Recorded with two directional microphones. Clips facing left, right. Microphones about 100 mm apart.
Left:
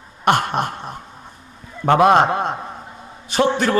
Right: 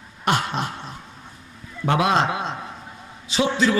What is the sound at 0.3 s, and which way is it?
A man's voice, 55° left (ahead or behind).